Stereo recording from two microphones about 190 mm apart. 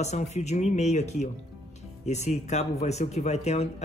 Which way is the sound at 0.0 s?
35° left (ahead or behind).